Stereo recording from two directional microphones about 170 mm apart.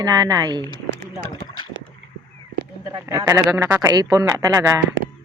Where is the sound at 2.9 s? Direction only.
20° right (ahead or behind).